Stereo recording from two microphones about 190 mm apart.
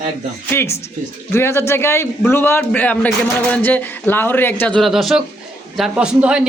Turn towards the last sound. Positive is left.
turn(degrees=-5)  # may be behind; listen again after turning